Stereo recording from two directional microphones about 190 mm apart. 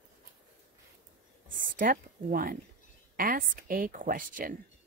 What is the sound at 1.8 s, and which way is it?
A woman's voice, 45° right (ahead or behind).